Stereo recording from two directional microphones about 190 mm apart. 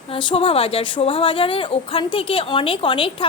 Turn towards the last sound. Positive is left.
turn(degrees=25)  # may be behind; listen again after turning